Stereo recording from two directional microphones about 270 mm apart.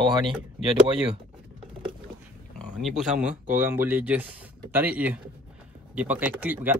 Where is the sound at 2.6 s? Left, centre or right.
Centre.